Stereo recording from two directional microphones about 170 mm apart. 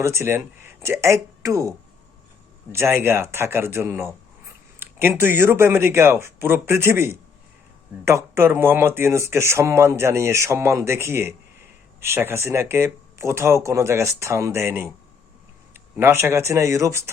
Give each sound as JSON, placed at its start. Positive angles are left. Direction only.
{"t": 0.0, "sound": "speech", "side_deg": -15}
{"t": 2.7, "sound": "speech", "side_deg": -15}
{"t": 16.0, "sound": "speech", "side_deg": -15}